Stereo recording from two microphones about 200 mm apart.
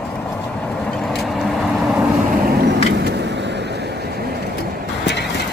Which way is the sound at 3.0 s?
55° right (ahead or behind).